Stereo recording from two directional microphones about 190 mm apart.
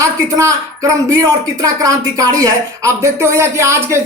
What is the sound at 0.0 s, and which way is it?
Speech, 15° right (ahead or behind).